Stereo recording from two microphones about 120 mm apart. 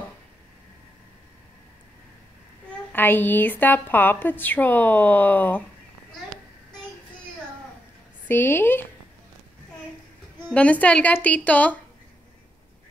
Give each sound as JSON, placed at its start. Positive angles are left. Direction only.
{"t": 2.9, "sound": "speech", "side_deg": 15}
{"t": 8.3, "sound": "speech", "side_deg": 15}
{"t": 10.5, "sound": "speech", "side_deg": 10}